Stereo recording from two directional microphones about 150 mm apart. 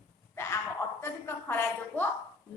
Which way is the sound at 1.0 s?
15° left (ahead or behind).